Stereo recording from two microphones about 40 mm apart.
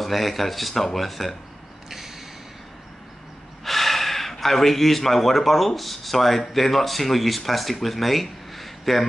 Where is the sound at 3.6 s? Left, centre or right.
Centre.